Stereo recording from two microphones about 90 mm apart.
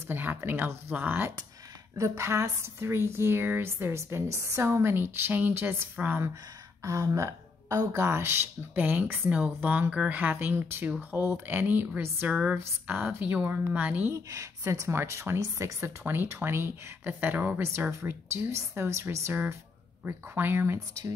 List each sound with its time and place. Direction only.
0.1 s a woman's voice: 25° right (ahead or behind)
2.0 s a woman's voice: 35° right (ahead or behind)
6.8 s a woman's voice: 35° right (ahead or behind)
10.9 s speech: 15° right (ahead or behind)
11.1 s a woman's voice: 25° right (ahead or behind)
14.1 s a woman's voice: 35° right (ahead or behind)